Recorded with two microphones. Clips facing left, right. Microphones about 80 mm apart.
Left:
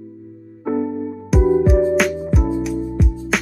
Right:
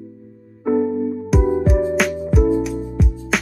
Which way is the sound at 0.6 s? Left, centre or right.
Centre.